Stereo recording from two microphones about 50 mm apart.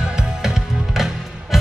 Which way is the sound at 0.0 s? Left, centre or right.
Centre.